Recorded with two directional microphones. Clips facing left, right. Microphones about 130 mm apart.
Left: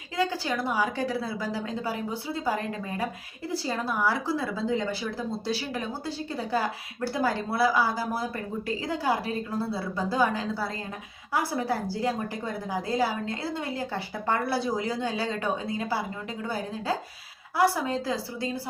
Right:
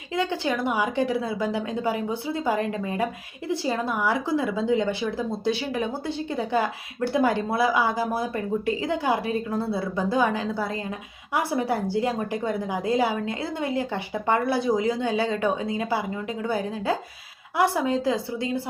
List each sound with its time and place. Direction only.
0.2 s a woman's voice: 25° right (ahead or behind)
17.6 s a woman's voice: 20° right (ahead or behind)